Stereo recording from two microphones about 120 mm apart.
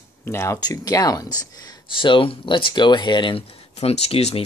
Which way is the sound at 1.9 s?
45° left (ahead or behind).